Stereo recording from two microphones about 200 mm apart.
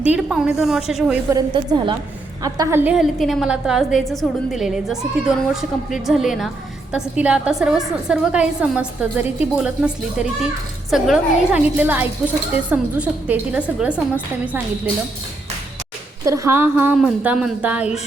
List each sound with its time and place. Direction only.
0.0 s a woman's voice: 5° right (ahead or behind)
1.3 s a woman's voice: 20° right (ahead or behind)
16.2 s a woman's voice: 15° right (ahead or behind)